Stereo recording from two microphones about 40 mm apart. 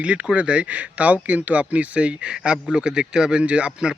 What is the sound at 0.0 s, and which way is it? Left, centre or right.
Speech, right.